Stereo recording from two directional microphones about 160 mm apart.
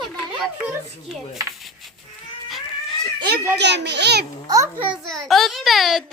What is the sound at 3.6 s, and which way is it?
Speech, 90° right.